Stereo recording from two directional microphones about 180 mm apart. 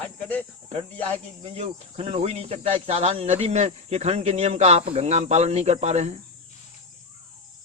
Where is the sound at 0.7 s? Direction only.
35° right (ahead or behind).